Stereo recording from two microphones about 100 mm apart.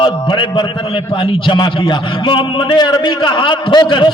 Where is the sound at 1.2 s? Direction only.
50° left (ahead or behind).